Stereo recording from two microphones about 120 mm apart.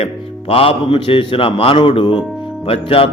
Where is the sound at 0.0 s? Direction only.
55° left (ahead or behind).